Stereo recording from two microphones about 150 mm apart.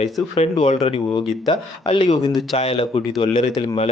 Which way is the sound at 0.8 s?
35° left (ahead or behind).